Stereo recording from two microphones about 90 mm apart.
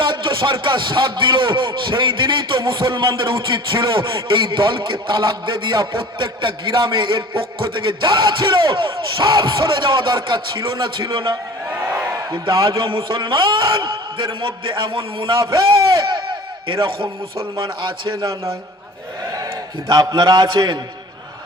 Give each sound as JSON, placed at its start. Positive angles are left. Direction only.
{"t": 0.0, "sound": "speech", "side_deg": -65}
{"t": 19.9, "sound": "speech", "side_deg": -55}